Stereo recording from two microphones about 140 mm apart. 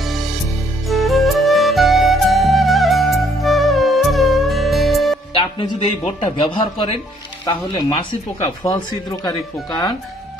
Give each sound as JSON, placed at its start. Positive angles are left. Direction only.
{"t": 0.0, "sound": "music", "side_deg": 0}
{"t": 5.3, "sound": "music", "side_deg": 35}
{"t": 6.2, "sound": "a man's voice", "side_deg": 35}
{"t": 7.7, "sound": "speech", "side_deg": 25}